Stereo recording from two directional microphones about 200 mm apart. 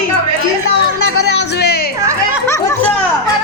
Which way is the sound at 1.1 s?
55° left (ahead or behind).